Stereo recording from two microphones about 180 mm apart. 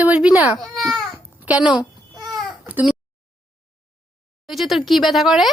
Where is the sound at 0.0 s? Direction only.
5° right (ahead or behind).